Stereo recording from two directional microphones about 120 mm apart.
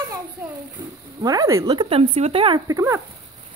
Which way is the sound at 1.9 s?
55° right (ahead or behind).